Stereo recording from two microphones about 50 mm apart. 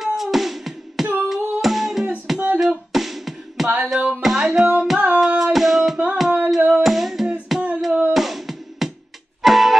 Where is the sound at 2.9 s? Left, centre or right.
Centre.